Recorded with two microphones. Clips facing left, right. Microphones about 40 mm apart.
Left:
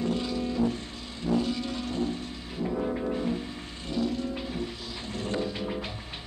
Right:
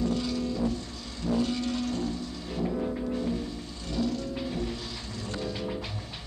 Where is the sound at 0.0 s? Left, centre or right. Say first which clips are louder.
Even; left.